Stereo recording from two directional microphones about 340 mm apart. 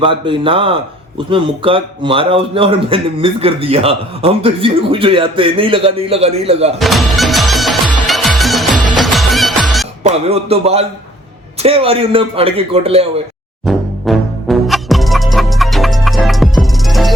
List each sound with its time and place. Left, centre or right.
0.0 s a man's voice: centre
6.7 s music: centre
10.0 s a man's voice: centre
13.7 s music: centre